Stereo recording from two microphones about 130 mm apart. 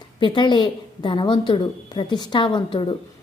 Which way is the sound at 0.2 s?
35° left (ahead or behind).